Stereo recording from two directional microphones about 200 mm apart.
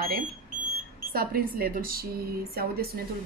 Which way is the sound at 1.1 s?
45° right (ahead or behind).